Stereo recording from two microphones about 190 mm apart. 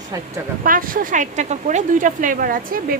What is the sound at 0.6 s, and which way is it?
Speech, 45° right (ahead or behind).